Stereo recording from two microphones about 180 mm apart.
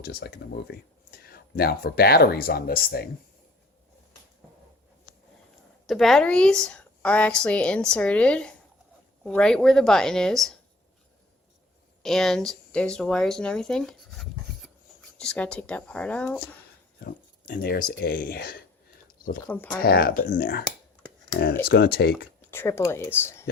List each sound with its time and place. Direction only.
0.0 s speech: 60° left (ahead or behind)
5.8 s a woman's voice: centre (ahead or behind)
12.0 s a woman's voice: centre (ahead or behind)
17.0 s speech: 50° left (ahead or behind)
19.0 s a sound: 50° left (ahead or behind)
19.4 s speech: 10° left (ahead or behind)
19.8 s speech: 55° left (ahead or behind)
22.4 s speech: 15° left (ahead or behind)